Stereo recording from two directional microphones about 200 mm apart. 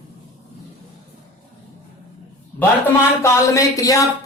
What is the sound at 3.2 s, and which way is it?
Speech, 15° left (ahead or behind).